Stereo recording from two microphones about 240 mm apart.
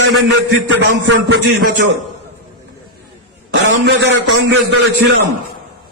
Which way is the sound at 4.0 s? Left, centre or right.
Right.